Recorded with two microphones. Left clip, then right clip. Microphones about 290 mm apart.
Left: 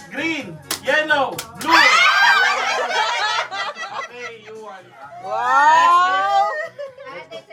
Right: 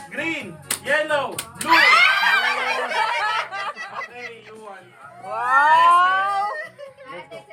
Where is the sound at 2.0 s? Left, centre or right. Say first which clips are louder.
Left 3 dB; centre.